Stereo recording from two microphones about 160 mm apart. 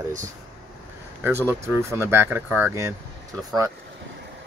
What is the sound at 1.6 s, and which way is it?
Speech, 15° right (ahead or behind).